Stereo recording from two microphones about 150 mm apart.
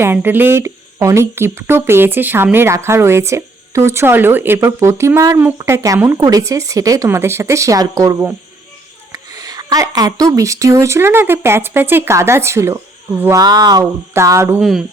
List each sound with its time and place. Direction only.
0.0 s speech: 15° right (ahead or behind)
13.4 s speech: 25° right (ahead or behind)
14.6 s speech: centre (ahead or behind)